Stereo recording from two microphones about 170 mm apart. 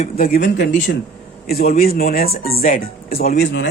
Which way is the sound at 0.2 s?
70° left (ahead or behind).